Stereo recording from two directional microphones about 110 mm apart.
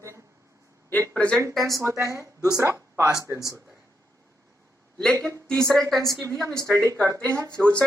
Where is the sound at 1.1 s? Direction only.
10° left (ahead or behind).